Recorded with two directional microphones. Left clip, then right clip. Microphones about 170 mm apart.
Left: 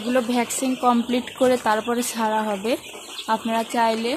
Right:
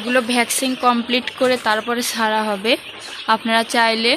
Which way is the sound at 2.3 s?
10° right (ahead or behind).